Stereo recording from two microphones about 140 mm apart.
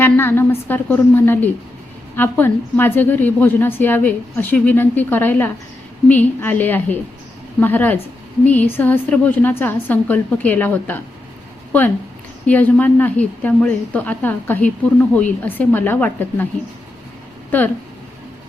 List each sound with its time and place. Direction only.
0.0 s a woman's voice: 15° left (ahead or behind)
12.5 s a woman's voice: 10° left (ahead or behind)